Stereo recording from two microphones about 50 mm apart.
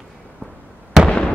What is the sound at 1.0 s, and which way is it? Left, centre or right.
Fireworks, left.